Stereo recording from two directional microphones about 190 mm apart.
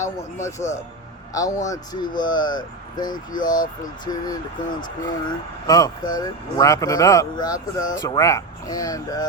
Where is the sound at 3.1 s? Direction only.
45° left (ahead or behind).